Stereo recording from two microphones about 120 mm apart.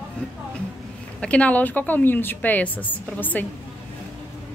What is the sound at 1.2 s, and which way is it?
Speech, 10° left (ahead or behind).